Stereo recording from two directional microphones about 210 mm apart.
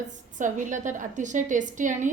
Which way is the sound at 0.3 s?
35° right (ahead or behind).